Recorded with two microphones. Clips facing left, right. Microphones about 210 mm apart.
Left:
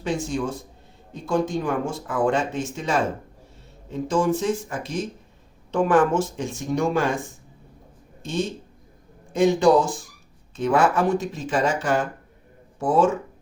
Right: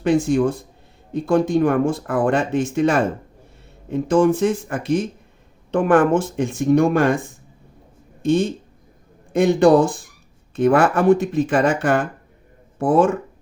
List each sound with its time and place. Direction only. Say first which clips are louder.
0.0 s speech: right 9 dB; 60° right (ahead or behind)
8.2 s speech: right 9 dB; 55° right (ahead or behind)